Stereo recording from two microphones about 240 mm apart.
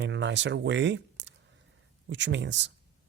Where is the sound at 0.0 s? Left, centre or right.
Right.